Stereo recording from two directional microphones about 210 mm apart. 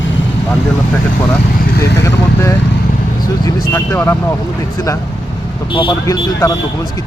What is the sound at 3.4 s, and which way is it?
Speech, 10° left (ahead or behind).